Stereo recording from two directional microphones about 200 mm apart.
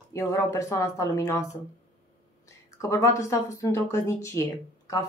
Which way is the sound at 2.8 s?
15° left (ahead or behind).